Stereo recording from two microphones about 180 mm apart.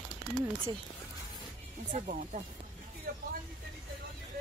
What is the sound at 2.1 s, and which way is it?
Speech, 45° right (ahead or behind).